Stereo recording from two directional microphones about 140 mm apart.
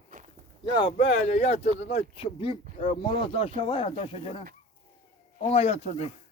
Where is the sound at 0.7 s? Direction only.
35° left (ahead or behind).